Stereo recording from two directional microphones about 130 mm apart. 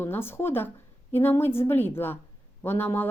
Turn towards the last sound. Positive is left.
turn(degrees=15)  # may be behind; listen again after turning